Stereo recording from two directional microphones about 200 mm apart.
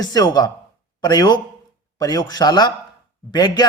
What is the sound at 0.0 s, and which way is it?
A man's voice, 20° left (ahead or behind).